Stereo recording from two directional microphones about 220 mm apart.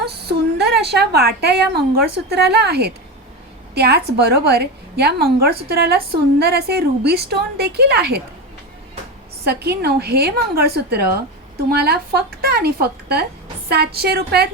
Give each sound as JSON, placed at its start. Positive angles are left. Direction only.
{"t": 0.0, "sound": "a woman's voice", "side_deg": -45}
{"t": 9.4, "sound": "a woman's voice", "side_deg": -45}